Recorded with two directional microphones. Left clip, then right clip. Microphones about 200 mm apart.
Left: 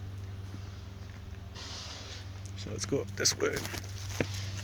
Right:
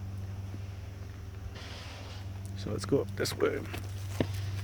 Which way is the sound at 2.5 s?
30° right (ahead or behind).